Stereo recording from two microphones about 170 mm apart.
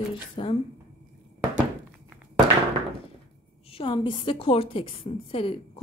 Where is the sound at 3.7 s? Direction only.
30° left (ahead or behind).